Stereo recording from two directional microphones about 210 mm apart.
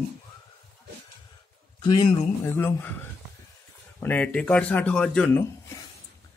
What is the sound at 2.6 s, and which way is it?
Speech, 10° left (ahead or behind).